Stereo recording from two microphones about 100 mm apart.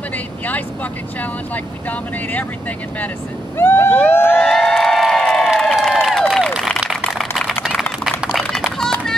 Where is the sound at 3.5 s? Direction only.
25° left (ahead or behind).